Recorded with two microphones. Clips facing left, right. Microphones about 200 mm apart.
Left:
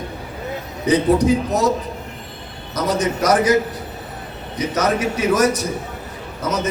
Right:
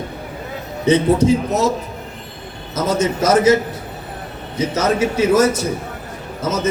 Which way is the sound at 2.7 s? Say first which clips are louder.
Right 2 dB; 25° right (ahead or behind).